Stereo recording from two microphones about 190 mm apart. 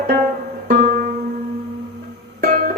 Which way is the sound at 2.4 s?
45° right (ahead or behind).